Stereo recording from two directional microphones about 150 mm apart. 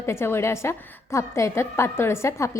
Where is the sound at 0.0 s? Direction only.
15° left (ahead or behind).